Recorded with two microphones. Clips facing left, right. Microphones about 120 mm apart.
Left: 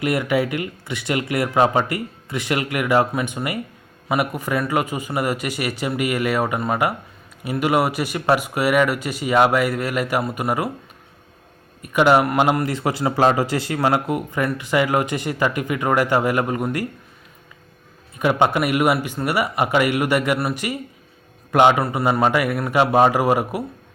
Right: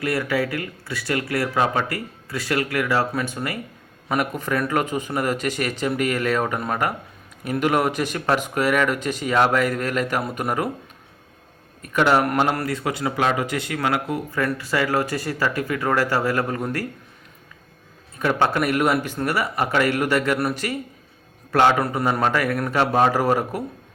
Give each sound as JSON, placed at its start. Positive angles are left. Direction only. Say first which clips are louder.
{"t": 0.0, "sound": "speech", "louder": "left 3 dB", "side_deg": 20}
{"t": 11.8, "sound": "speech", "louder": "left 3 dB", "side_deg": 10}
{"t": 12.6, "sound": "speech", "louder": "left 3 dB", "side_deg": 25}
{"t": 18.2, "sound": "speech", "louder": "left 2 dB", "side_deg": 15}